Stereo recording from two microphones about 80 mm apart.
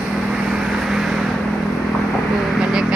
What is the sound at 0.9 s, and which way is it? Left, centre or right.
Vehicle, centre.